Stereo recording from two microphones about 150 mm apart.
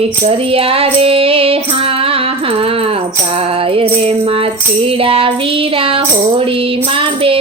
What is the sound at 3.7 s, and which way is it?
Music, 40° right (ahead or behind).